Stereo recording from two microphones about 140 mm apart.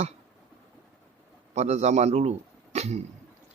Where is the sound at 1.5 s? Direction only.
55° right (ahead or behind).